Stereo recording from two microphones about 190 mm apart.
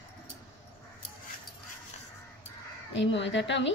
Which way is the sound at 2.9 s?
70° left (ahead or behind).